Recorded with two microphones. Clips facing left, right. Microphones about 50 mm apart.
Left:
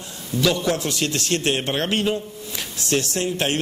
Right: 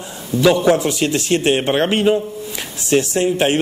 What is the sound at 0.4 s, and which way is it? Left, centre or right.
A man's voice, centre.